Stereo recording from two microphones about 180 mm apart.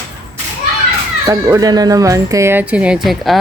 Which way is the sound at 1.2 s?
20° right (ahead or behind).